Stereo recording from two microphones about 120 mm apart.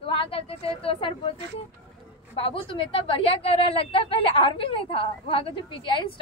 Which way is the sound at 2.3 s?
50° left (ahead or behind).